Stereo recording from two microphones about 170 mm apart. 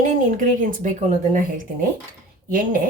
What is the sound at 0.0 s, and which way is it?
Speech, 50° right (ahead or behind).